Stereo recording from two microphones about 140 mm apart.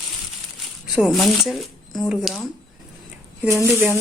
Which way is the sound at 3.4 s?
20° right (ahead or behind).